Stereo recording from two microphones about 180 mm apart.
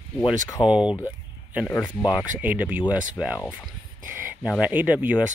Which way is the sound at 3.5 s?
10° right (ahead or behind).